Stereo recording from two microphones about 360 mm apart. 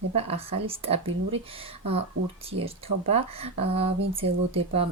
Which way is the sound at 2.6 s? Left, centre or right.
Centre.